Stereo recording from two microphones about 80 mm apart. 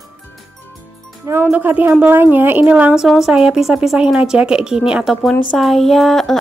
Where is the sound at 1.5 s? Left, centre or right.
Centre.